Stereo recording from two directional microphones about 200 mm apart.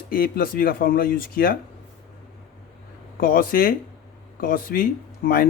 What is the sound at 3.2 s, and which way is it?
Speech, 45° left (ahead or behind).